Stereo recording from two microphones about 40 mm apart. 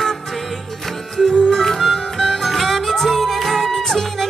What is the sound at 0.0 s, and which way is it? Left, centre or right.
Music, centre.